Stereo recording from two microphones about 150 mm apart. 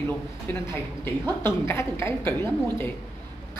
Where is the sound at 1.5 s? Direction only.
15° left (ahead or behind).